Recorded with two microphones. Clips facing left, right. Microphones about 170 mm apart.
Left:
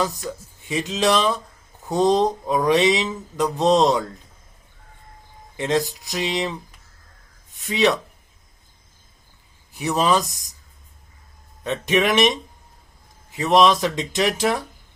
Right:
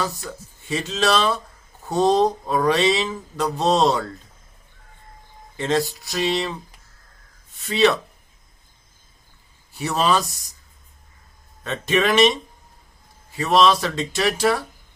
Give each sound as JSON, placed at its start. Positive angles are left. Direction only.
{"t": 0.0, "sound": "mantra", "side_deg": 15}
{"t": 5.5, "sound": "mantra", "side_deg": 15}
{"t": 7.5, "sound": "speech", "side_deg": 15}
{"t": 9.7, "sound": "mantra", "side_deg": 15}
{"t": 11.6, "sound": "mantra", "side_deg": 15}